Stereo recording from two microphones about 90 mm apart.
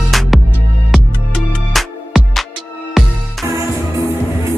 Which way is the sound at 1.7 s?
Centre (ahead or behind).